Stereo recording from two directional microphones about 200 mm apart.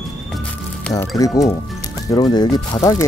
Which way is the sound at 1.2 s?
15° left (ahead or behind).